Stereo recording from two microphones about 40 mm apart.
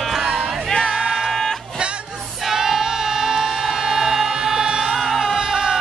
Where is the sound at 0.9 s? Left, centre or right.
Centre.